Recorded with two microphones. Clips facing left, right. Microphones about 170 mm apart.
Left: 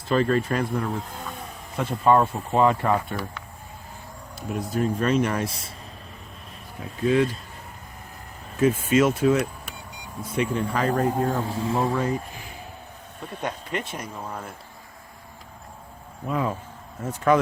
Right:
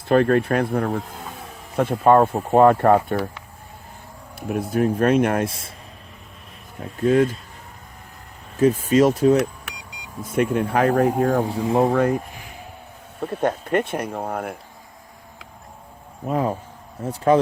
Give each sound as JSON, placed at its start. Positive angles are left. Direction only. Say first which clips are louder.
{"t": 0.1, "sound": "speech", "louder": "right 5 dB", "side_deg": -60}
{"t": 4.4, "sound": "speech", "louder": "right 5 dB", "side_deg": -60}
{"t": 6.7, "sound": "speech", "louder": "right 4 dB", "side_deg": -45}
{"t": 8.5, "sound": "speech", "louder": "right 3 dB", "side_deg": -35}
{"t": 10.2, "sound": "speech", "louder": "right 5 dB", "side_deg": -50}
{"t": 13.4, "sound": "speech", "louder": "right 9 dB", "side_deg": -55}
{"t": 16.2, "sound": "speech", "louder": "right 4 dB", "side_deg": -45}
{"t": 17.0, "sound": "speech", "louder": "right 3 dB", "side_deg": -30}